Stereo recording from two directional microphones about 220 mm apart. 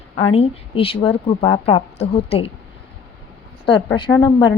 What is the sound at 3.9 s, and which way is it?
Speech, 15° left (ahead or behind).